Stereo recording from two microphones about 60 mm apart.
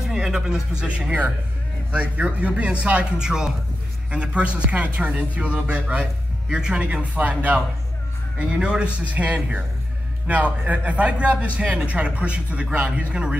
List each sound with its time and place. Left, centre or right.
0.0 s a man's voice: centre